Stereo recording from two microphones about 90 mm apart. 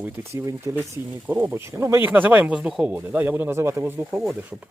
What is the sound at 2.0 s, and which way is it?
Speech, 15° right (ahead or behind).